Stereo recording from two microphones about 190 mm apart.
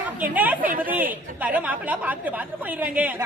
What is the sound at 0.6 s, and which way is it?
Speech, 45° right (ahead or behind).